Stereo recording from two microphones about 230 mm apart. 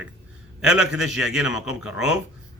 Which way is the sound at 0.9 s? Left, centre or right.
Centre.